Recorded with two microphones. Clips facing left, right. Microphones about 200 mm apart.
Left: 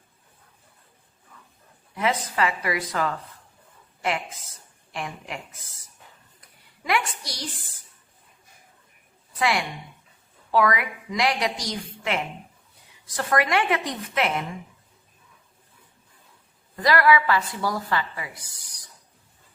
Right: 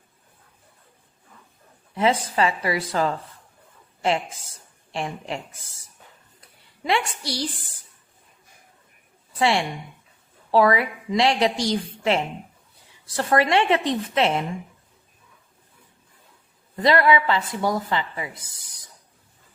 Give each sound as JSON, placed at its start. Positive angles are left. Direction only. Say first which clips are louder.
{"t": 2.0, "sound": "a woman's voice", "louder": "right 4 dB", "side_deg": -30}
{"t": 6.8, "sound": "a woman's voice", "louder": "right 2 dB", "side_deg": -30}
{"t": 9.4, "sound": "a woman's voice", "louder": "right 3 dB", "side_deg": -30}
{"t": 16.7, "sound": "a woman's voice", "louder": "right 2 dB", "side_deg": -25}